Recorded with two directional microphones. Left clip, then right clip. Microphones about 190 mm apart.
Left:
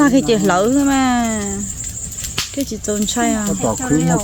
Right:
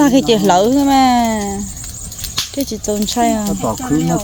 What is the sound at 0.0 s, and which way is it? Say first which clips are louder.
Speech: right 2 dB; 15° right (ahead or behind).